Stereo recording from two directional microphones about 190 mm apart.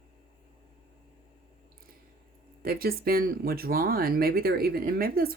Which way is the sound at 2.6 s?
50° right (ahead or behind).